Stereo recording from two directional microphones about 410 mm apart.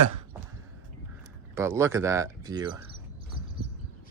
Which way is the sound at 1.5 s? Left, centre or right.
Centre.